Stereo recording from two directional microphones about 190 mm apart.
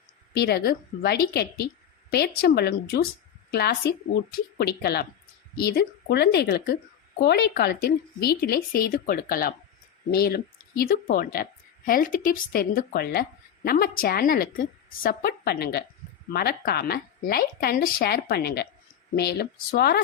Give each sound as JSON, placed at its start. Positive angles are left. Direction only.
{"t": 0.3, "sound": "a woman's voice", "side_deg": 55}